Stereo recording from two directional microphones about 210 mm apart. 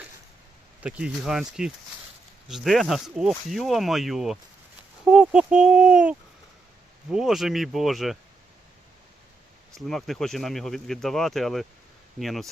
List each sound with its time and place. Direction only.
0.8 s speech: 5° right (ahead or behind)
9.7 s speech: centre (ahead or behind)